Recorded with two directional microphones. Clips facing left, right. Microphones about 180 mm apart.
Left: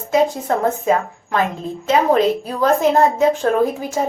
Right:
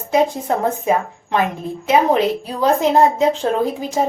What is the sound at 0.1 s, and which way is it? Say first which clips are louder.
A woman's voice: even; 15° right (ahead or behind).